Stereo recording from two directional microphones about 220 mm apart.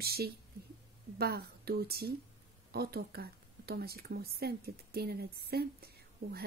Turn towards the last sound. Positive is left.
turn(degrees=-45)  # may be behind; listen again after turning